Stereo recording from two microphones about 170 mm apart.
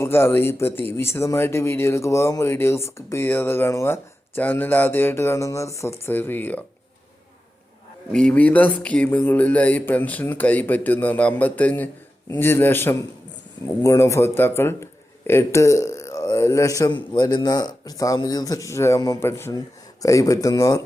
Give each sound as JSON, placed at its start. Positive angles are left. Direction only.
{"t": 0.0, "sound": "speech", "side_deg": 15}
{"t": 8.1, "sound": "a man's voice", "side_deg": 5}